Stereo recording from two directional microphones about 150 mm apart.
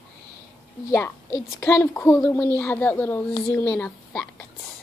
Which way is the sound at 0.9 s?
20° left (ahead or behind).